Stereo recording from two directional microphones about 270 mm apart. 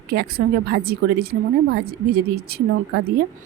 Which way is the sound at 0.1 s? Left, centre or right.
Right.